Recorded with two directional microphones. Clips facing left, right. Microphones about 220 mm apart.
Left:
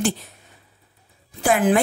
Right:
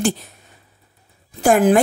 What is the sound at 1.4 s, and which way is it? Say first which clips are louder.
Speech: right 4 dB; 45° right (ahead or behind).